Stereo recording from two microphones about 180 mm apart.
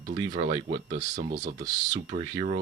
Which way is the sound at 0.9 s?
45° right (ahead or behind).